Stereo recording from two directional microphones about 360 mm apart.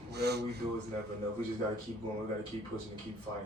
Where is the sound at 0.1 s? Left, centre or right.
Right.